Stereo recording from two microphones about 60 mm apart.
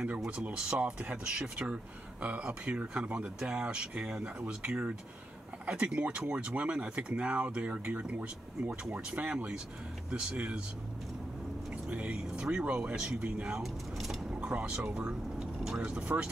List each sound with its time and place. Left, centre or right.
0.4 s speech: centre
11.9 s speech: centre
14.3 s vehicle: right
15.8 s speech: centre